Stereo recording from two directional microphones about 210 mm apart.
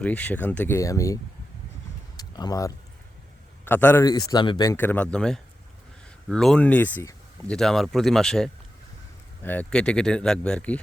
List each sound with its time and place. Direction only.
0.0 s a man's voice: 5° left (ahead or behind)
2.1 s a sound: 20° left (ahead or behind)
3.6 s a man's voice: 10° left (ahead or behind)